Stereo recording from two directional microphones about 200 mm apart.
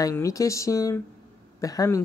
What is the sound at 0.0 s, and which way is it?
Speech, 15° left (ahead or behind).